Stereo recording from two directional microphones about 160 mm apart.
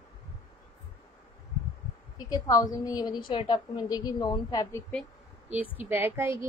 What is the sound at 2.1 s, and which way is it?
A woman's voice, 25° left (ahead or behind).